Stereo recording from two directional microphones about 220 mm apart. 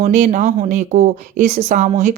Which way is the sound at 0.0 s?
35° right (ahead or behind).